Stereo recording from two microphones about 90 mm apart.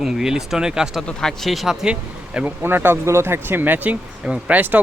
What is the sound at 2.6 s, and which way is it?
Speech, 25° right (ahead or behind).